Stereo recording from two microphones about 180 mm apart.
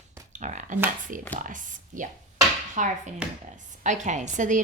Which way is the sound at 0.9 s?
45° right (ahead or behind).